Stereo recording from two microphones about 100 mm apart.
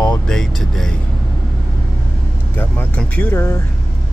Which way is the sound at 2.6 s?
15° left (ahead or behind).